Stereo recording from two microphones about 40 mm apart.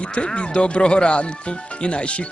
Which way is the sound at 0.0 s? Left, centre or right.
Left.